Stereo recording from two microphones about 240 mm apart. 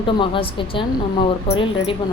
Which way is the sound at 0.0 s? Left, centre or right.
Left.